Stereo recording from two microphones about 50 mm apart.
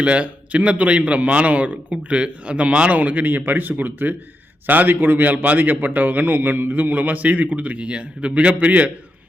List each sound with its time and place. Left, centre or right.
0.0 s a man's voice: right
5.2 s a man's voice: right